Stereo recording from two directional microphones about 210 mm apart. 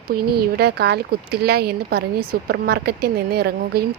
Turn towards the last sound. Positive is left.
turn(degrees=-50)  # may be behind; listen again after turning